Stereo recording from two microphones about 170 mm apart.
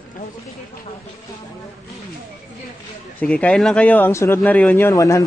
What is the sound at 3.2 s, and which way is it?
Speech, 5° left (ahead or behind).